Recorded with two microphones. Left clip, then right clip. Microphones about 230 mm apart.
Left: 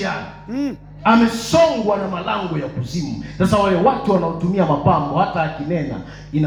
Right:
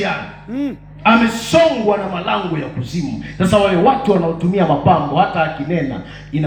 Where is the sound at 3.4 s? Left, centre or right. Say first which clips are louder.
Right 3 dB; right.